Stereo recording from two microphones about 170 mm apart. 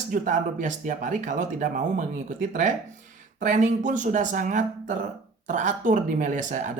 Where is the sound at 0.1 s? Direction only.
50° right (ahead or behind).